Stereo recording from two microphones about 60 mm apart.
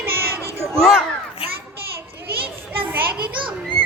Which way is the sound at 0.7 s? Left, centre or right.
Centre.